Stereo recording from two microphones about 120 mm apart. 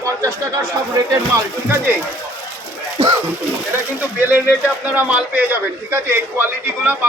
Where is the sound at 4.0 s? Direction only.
15° right (ahead or behind).